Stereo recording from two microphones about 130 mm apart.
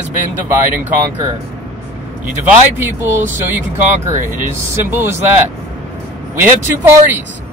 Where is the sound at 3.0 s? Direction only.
20° right (ahead or behind).